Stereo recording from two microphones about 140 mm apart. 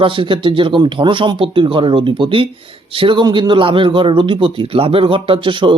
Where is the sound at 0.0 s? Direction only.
35° right (ahead or behind).